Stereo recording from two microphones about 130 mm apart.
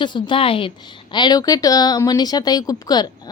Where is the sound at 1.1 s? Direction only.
30° left (ahead or behind).